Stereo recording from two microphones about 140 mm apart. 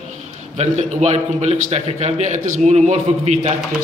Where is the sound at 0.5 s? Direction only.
50° right (ahead or behind).